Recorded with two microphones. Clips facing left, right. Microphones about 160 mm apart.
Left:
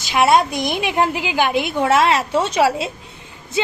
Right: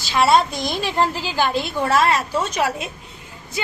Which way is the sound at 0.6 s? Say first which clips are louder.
Left 3 dB; 60° left (ahead or behind).